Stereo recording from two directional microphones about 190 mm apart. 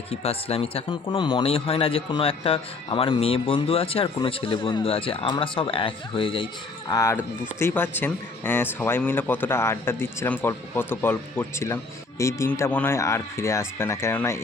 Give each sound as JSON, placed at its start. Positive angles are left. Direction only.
{"t": 0.1, "sound": "speech", "side_deg": 30}
{"t": 6.9, "sound": "speech", "side_deg": 15}